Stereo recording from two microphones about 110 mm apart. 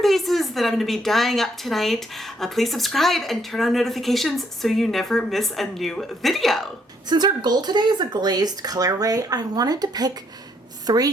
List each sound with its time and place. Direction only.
0.0 s a woman's voice: centre (ahead or behind)
7.1 s a woman's voice: 40° right (ahead or behind)